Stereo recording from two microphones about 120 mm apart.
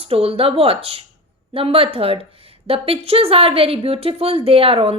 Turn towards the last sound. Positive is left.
turn(degrees=-50)  # may be behind; listen again after turning